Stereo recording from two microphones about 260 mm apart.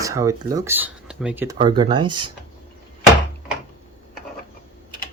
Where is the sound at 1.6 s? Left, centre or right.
Centre.